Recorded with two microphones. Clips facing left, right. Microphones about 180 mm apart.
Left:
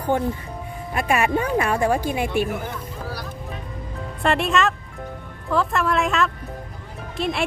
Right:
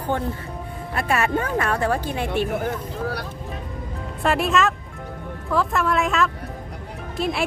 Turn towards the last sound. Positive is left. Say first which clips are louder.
# even
turn(degrees=0)  # may be behind; listen again after turning